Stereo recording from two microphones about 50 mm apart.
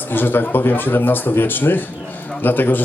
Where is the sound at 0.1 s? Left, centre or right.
Left.